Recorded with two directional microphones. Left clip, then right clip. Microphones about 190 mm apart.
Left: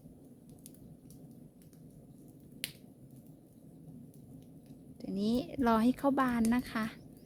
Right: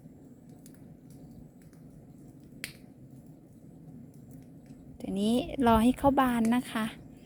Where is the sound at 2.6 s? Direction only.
25° right (ahead or behind).